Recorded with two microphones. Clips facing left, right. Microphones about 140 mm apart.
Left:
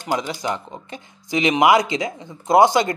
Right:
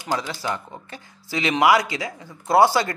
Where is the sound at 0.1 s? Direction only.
15° left (ahead or behind).